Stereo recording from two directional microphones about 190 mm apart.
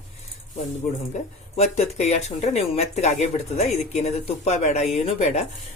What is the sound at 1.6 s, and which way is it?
Speech, 35° left (ahead or behind).